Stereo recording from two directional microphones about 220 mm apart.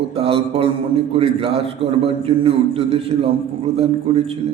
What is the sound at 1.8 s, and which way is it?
A man's voice, 25° right (ahead or behind).